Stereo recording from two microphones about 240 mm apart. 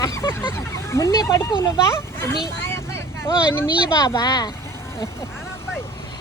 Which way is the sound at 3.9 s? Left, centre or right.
Centre.